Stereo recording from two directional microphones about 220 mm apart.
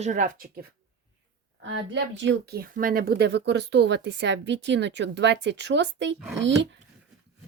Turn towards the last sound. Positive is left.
turn(degrees=-55)  # may be behind; listen again after turning